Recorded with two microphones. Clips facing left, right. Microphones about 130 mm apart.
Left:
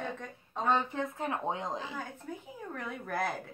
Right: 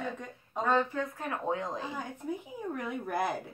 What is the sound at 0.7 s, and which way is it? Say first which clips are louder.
Speech: right 1 dB; 20° left (ahead or behind).